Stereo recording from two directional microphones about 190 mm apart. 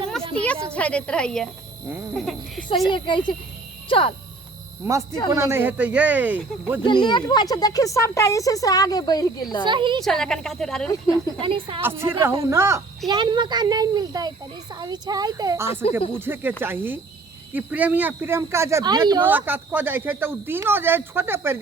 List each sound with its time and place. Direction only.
0.1 s a sound: 5° left (ahead or behind)
0.7 s speech: 5° left (ahead or behind)
2.9 s speech: 25° left (ahead or behind)
5.3 s speech: 15° right (ahead or behind)
6.8 s speech: 25° left (ahead or behind)
9.6 s a child's voice: 25° right (ahead or behind)
10.0 s speech: centre (ahead or behind)
11.3 s a child's voice: 25° right (ahead or behind)
11.8 s a child's voice: 10° right (ahead or behind)
15.7 s speech: 35° left (ahead or behind)
16.2 s speech: 10° right (ahead or behind)
19.2 s speech: 10° right (ahead or behind)